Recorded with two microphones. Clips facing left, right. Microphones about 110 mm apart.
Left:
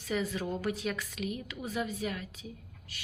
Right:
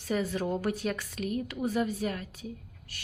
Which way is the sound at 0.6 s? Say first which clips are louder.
Right 2 dB; 50° right (ahead or behind).